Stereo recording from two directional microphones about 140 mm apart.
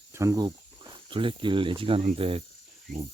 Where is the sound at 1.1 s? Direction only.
35° right (ahead or behind).